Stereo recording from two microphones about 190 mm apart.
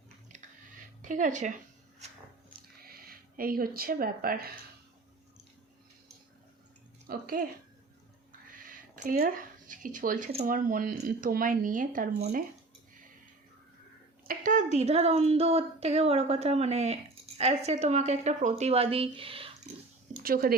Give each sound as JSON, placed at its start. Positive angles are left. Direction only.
{"t": 1.0, "sound": "speech", "side_deg": -40}
{"t": 2.8, "sound": "speech", "side_deg": -50}
{"t": 7.1, "sound": "speech", "side_deg": -50}
{"t": 9.0, "sound": "speech", "side_deg": -50}
{"t": 14.3, "sound": "speech", "side_deg": -45}
{"t": 20.2, "sound": "speech", "side_deg": -50}